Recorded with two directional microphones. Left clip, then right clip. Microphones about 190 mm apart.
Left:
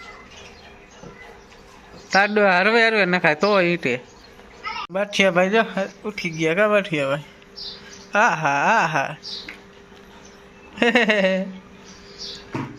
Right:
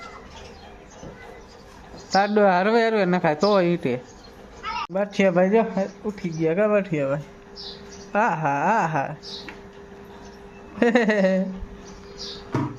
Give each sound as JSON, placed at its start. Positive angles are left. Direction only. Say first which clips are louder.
{"t": 2.1, "sound": "speech", "louder": "left 2 dB", "side_deg": 0}
{"t": 10.8, "sound": "speech", "louder": "left 2 dB", "side_deg": -5}